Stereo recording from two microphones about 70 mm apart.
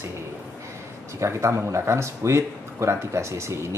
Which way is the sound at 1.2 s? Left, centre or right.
Right.